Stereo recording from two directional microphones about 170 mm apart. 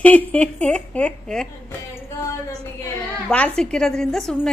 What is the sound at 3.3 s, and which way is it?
A woman's voice, 5° left (ahead or behind).